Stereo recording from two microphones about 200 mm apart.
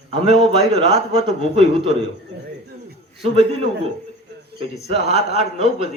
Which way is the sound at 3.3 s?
30° right (ahead or behind).